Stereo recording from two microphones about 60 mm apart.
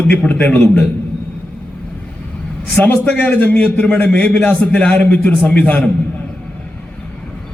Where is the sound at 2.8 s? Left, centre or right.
Left.